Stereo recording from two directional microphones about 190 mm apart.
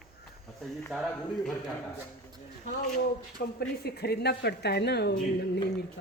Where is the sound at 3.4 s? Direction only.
55° left (ahead or behind).